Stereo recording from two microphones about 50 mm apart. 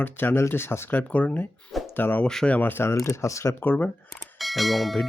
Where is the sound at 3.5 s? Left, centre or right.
Left.